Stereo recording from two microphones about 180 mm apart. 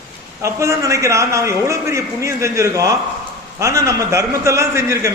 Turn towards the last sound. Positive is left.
turn(degrees=-15)  # may be behind; listen again after turning